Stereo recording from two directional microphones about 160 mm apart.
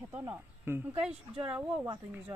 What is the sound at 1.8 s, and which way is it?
Speech, 25° right (ahead or behind).